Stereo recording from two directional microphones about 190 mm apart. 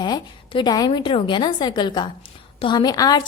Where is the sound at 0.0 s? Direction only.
25° left (ahead or behind).